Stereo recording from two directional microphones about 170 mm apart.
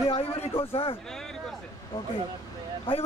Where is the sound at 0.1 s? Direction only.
35° left (ahead or behind).